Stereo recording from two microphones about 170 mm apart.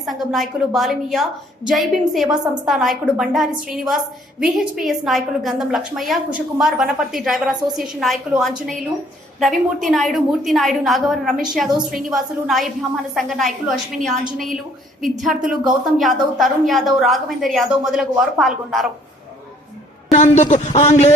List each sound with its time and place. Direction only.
0.0 s a woman's voice: centre (ahead or behind)
20.1 s a man's voice: 40° left (ahead or behind)